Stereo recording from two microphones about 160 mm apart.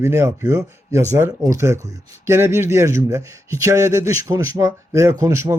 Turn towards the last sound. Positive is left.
turn(degrees=-20)  # may be behind; listen again after turning